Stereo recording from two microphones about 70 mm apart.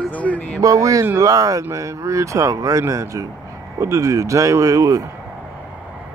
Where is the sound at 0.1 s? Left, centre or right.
Left.